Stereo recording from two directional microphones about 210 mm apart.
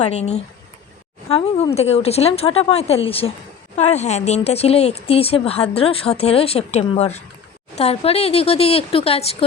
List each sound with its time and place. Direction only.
0.0 s speech: 30° left (ahead or behind)